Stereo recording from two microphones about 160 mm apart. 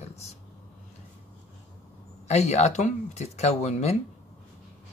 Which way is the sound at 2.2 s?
45° left (ahead or behind).